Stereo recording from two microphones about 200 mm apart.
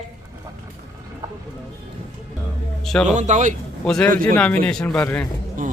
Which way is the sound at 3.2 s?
35° right (ahead or behind).